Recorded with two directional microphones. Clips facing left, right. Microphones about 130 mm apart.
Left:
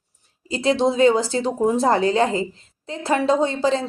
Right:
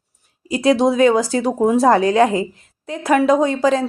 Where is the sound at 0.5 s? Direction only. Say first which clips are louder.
Right 4 dB; 15° right (ahead or behind).